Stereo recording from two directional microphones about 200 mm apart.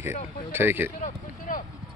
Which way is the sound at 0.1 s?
40° left (ahead or behind).